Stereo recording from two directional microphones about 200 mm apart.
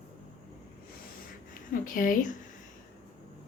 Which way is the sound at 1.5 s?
45° left (ahead or behind).